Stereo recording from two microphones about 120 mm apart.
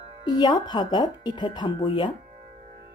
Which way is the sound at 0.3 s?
35° left (ahead or behind).